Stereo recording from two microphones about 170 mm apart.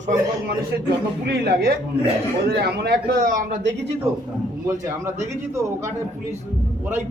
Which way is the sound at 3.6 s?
90° right.